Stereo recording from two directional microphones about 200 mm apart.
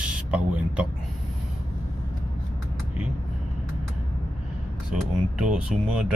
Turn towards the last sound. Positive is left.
turn(degrees=-5)  # may be behind; listen again after turning